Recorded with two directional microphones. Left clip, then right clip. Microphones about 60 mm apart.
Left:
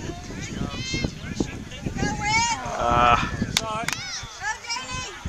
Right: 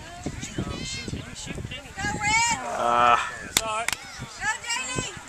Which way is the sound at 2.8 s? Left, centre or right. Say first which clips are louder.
Left 1 dB; centre.